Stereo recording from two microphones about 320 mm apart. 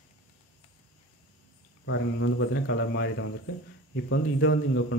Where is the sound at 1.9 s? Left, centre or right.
Left.